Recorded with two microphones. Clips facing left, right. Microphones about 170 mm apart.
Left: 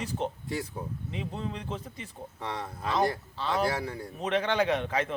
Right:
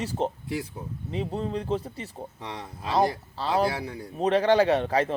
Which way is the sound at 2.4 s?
15° right (ahead or behind).